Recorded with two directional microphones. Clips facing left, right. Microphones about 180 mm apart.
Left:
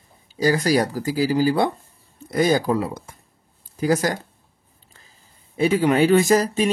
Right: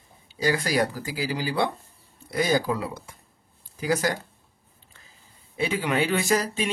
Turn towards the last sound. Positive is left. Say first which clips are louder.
# left 7 dB
turn(degrees=40)  # may be behind; listen again after turning